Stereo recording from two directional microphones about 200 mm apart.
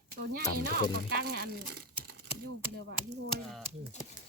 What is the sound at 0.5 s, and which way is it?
Music, 50° right (ahead or behind).